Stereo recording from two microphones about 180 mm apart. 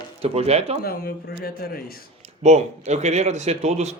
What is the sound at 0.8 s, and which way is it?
Speech, 55° left (ahead or behind).